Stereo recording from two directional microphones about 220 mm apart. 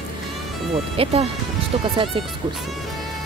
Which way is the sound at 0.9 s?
25° right (ahead or behind).